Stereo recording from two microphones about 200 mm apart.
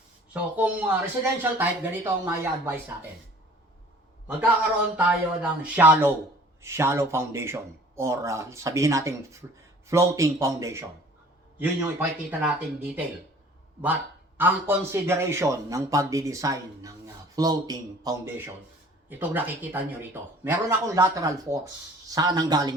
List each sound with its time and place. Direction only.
0.5 s speech: 10° right (ahead or behind)
4.3 s speech: 5° right (ahead or behind)
14.3 s a man's voice: 10° right (ahead or behind)